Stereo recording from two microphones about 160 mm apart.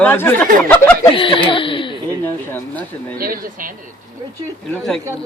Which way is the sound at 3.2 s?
60° right (ahead or behind).